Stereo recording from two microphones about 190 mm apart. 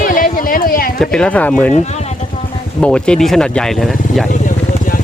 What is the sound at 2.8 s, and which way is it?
Speech, 5° left (ahead or behind).